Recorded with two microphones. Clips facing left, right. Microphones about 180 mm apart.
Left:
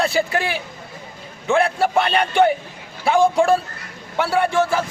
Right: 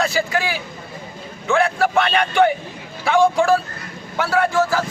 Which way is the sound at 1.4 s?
30° left (ahead or behind).